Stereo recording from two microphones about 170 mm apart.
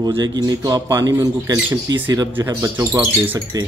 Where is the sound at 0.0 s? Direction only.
25° right (ahead or behind).